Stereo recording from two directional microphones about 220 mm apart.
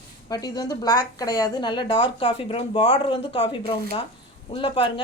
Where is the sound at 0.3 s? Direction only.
15° left (ahead or behind).